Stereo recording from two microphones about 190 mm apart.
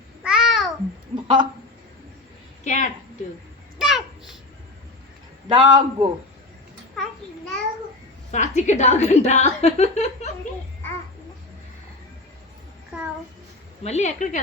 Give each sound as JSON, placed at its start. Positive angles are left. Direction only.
{"t": 0.2, "sound": "babbling", "side_deg": -5}
{"t": 1.1, "sound": "a sound", "side_deg": -25}
{"t": 2.6, "sound": "a woman's voice", "side_deg": 40}
{"t": 3.8, "sound": "babbling", "side_deg": 0}
{"t": 5.5, "sound": "a man's voice", "side_deg": -25}
{"t": 8.3, "sound": "a woman's voice", "side_deg": 40}
{"t": 13.8, "sound": "a woman's voice", "side_deg": 35}